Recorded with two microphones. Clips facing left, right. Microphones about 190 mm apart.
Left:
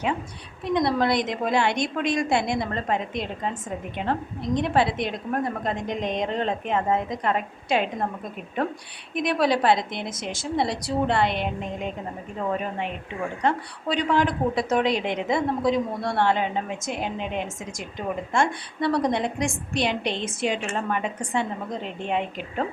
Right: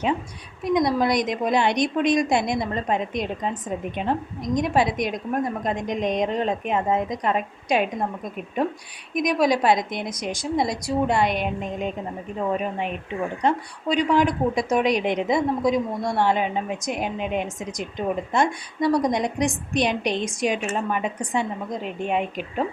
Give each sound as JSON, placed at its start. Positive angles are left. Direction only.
{"t": 0.6, "sound": "speech", "side_deg": -15}
{"t": 9.2, "sound": "speech", "side_deg": -15}
{"t": 13.4, "sound": "speech", "side_deg": -15}